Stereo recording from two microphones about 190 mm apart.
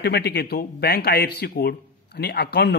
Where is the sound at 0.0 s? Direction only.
55° left (ahead or behind).